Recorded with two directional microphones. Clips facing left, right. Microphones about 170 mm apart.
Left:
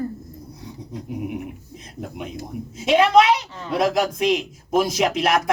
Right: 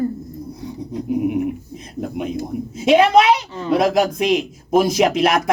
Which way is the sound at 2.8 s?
15° right (ahead or behind).